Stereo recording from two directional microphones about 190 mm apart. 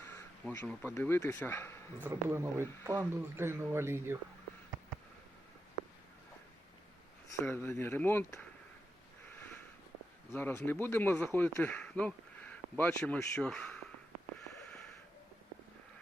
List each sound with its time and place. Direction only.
0.1 s speech: 10° left (ahead or behind)
2.0 s speech: 10° right (ahead or behind)
7.4 s speech: 10° left (ahead or behind)
10.3 s speech: 10° left (ahead or behind)